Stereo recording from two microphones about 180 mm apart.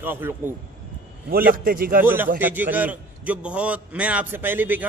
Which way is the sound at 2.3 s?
10° right (ahead or behind).